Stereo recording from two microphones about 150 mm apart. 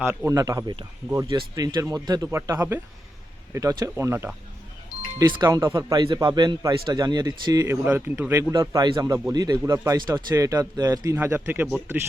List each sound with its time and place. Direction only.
0.0 s speech: 15° right (ahead or behind)
4.9 s music: 75° left (ahead or behind)
5.4 s speech: 25° right (ahead or behind)